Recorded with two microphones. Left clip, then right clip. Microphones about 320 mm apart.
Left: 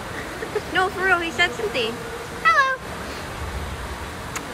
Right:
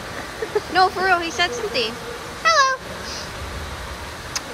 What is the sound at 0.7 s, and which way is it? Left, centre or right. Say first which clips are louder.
A woman's voice: right 3 dB; centre.